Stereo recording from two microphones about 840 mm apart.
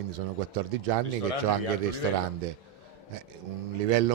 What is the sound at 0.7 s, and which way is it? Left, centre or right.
Speech, right.